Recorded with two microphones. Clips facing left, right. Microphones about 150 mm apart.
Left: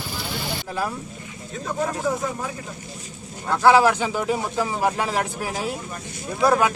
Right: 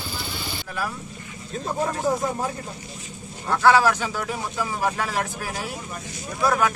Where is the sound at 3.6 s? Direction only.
20° left (ahead or behind).